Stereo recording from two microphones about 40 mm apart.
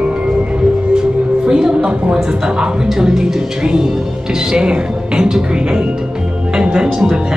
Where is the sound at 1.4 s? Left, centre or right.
Centre.